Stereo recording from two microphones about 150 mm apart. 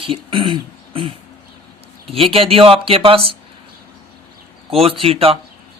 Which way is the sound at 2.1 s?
40° right (ahead or behind).